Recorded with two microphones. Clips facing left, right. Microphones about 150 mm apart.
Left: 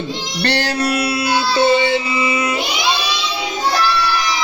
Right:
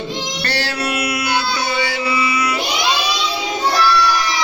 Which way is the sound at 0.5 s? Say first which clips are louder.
Left 3 dB; 45° left (ahead or behind).